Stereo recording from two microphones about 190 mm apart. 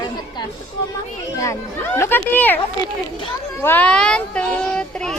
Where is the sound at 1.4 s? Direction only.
15° left (ahead or behind).